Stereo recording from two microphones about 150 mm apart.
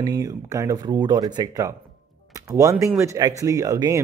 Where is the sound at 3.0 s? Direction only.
20° right (ahead or behind).